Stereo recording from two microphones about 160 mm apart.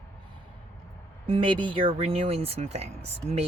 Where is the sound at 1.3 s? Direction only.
35° right (ahead or behind).